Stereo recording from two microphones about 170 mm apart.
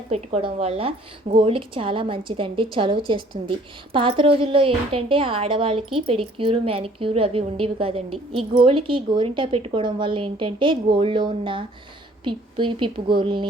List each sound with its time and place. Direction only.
0.1 s a woman's voice: 35° right (ahead or behind)